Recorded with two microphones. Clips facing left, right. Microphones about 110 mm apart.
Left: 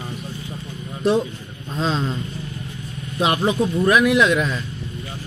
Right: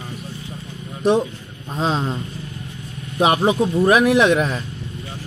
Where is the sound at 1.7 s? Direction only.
20° right (ahead or behind).